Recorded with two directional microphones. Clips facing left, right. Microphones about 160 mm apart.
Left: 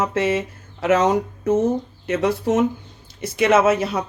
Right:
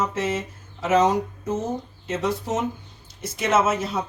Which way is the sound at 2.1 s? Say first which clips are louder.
Left 6 dB; 65° left (ahead or behind).